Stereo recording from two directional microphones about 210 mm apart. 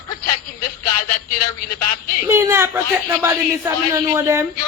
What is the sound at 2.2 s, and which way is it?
Speech, 15° right (ahead or behind).